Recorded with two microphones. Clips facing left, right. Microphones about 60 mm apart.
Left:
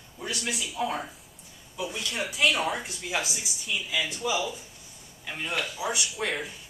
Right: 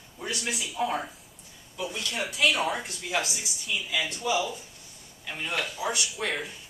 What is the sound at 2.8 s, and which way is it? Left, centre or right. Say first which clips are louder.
Speech: right 1 dB; centre.